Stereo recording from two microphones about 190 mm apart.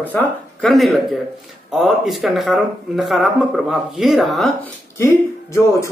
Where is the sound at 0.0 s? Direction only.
5° left (ahead or behind).